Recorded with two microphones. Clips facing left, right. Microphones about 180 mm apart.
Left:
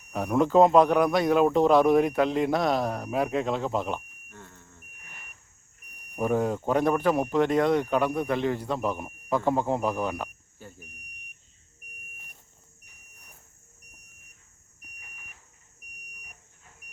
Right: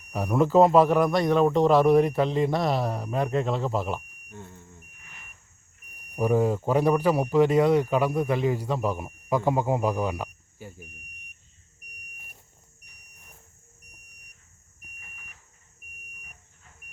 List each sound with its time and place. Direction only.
0.1 s a man's voice: 5° right (ahead or behind)
4.3 s insect: 20° right (ahead or behind)
6.1 s speech: 5° right (ahead or behind)